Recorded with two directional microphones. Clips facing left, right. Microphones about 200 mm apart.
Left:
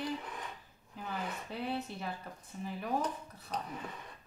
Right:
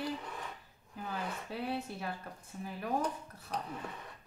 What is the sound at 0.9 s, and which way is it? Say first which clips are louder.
A woman's voice: even; centre (ahead or behind).